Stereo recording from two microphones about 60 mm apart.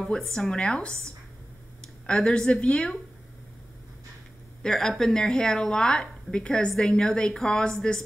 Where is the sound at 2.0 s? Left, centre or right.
Centre.